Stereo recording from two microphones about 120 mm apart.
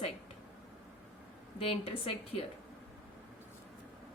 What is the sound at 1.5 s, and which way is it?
Speech, 55° left (ahead or behind).